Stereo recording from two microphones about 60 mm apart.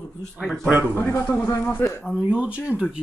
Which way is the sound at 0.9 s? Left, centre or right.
Left.